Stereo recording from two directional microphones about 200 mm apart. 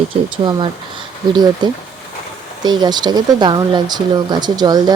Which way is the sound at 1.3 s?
20° right (ahead or behind).